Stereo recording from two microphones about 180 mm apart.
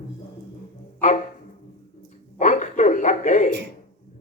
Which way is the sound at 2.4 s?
40° left (ahead or behind).